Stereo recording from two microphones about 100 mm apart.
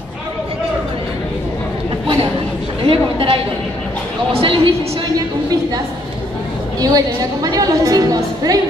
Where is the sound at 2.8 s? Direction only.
65° right (ahead or behind).